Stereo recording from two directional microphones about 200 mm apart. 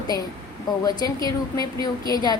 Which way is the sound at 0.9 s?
20° left (ahead or behind).